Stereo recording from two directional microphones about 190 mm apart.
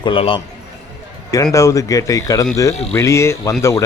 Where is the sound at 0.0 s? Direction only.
30° left (ahead or behind).